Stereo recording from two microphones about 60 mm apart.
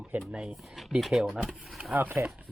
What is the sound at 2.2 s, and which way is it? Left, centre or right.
Speech, right.